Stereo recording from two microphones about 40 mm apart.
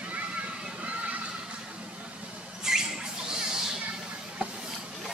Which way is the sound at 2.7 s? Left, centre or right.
Centre.